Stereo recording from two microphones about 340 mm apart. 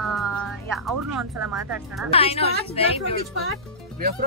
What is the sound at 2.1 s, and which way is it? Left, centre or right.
Speech, centre.